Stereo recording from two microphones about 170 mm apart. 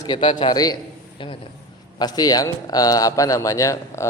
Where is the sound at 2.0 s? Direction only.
25° left (ahead or behind).